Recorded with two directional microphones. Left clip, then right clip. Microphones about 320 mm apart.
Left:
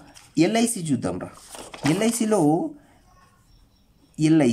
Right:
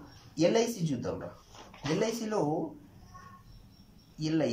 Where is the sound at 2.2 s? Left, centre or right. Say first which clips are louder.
Left 13 dB; left.